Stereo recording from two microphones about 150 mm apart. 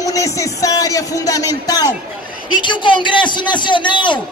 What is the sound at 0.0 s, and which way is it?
A man's voice, 20° left (ahead or behind).